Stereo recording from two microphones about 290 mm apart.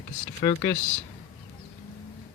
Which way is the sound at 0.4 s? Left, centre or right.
Centre.